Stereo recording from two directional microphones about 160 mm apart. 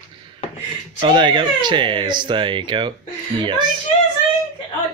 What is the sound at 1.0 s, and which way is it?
Speech, 30° right (ahead or behind).